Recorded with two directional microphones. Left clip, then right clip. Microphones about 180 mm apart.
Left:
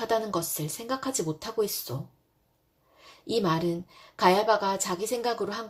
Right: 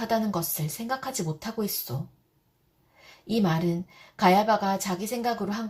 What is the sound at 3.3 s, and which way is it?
A woman's voice, 35° left (ahead or behind).